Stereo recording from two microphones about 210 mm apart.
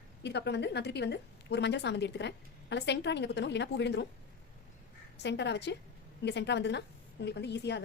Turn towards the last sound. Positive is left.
turn(degrees=55)  # may be behind; listen again after turning